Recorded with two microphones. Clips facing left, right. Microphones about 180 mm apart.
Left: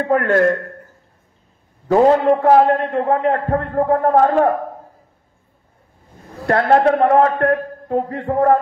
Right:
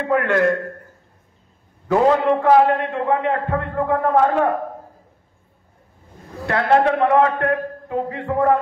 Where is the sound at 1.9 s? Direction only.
40° left (ahead or behind).